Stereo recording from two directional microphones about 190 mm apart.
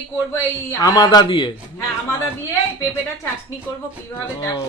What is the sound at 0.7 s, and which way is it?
Speech, 20° left (ahead or behind).